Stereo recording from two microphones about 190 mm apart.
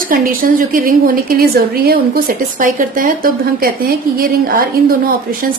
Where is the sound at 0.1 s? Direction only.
45° right (ahead or behind).